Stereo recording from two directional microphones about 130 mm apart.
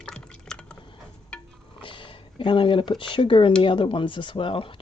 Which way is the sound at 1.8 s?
40° left (ahead or behind).